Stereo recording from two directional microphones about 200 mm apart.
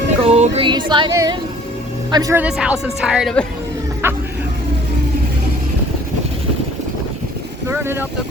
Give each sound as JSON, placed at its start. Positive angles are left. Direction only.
{"t": 0.3, "sound": "music", "side_deg": -30}
{"t": 2.4, "sound": "speech", "side_deg": -5}
{"t": 4.0, "sound": "a sound", "side_deg": -10}
{"t": 7.7, "sound": "speech", "side_deg": -10}